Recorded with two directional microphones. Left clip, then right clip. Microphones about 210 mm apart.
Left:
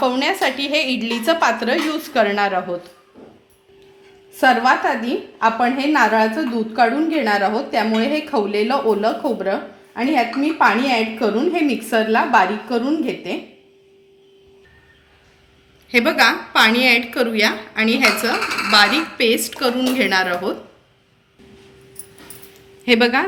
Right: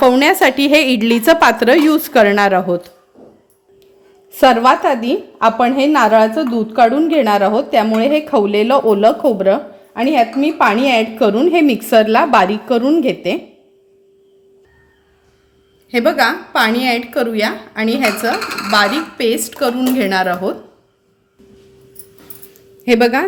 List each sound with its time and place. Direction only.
0.0 s speech: 60° right (ahead or behind)
4.3 s a woman's voice: 50° right (ahead or behind)
15.9 s speech: 55° right (ahead or behind)
22.9 s a woman's voice: 40° right (ahead or behind)